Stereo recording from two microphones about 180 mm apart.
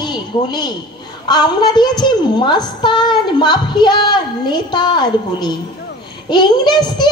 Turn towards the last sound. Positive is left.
turn(degrees=25)  # may be behind; listen again after turning